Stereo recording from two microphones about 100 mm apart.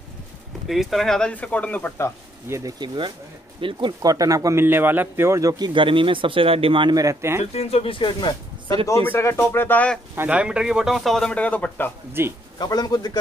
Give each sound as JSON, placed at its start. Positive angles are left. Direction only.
{"t": 0.7, "sound": "a man's voice", "side_deg": 0}
{"t": 2.4, "sound": "speech", "side_deg": -30}
{"t": 3.6, "sound": "speech", "side_deg": -60}
{"t": 4.0, "sound": "a man's voice", "side_deg": -35}
{"t": 5.7, "sound": "speech", "side_deg": -55}
{"t": 7.0, "sound": "speech", "side_deg": -30}
{"t": 7.5, "sound": "speech", "side_deg": 75}
{"t": 9.1, "sound": "speech", "side_deg": 25}
{"t": 10.1, "sound": "a man's voice", "side_deg": -15}
{"t": 12.1, "sound": "speech", "side_deg": -25}
{"t": 12.5, "sound": "a man's voice", "side_deg": 40}